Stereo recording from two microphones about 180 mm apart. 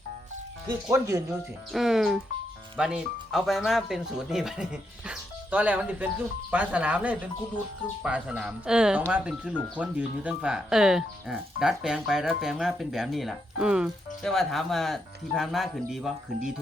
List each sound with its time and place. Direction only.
0.7 s speech: 15° right (ahead or behind)
1.7 s speech: centre (ahead or behind)